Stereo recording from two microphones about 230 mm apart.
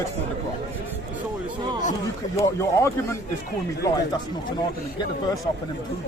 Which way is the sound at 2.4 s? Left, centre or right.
Centre.